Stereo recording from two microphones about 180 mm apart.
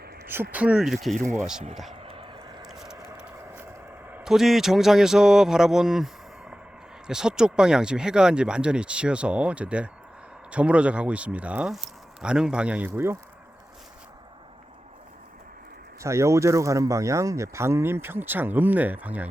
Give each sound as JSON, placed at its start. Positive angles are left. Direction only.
{"t": 0.5, "sound": "speech", "side_deg": -5}
{"t": 1.9, "sound": "dog", "side_deg": -30}
{"t": 2.6, "sound": "a sound", "side_deg": 0}
{"t": 7.1, "sound": "speech", "side_deg": -5}
{"t": 16.0, "sound": "speech", "side_deg": -15}